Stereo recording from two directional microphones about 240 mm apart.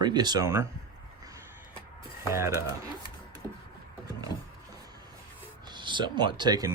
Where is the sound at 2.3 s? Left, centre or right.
Centre.